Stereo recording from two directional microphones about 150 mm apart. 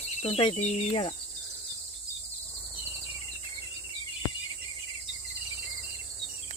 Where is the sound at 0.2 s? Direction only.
40° left (ahead or behind).